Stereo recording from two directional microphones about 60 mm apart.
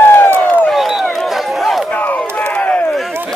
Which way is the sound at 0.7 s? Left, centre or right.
Centre.